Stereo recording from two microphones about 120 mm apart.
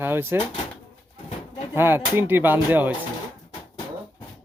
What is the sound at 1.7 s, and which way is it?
Speech, 20° right (ahead or behind).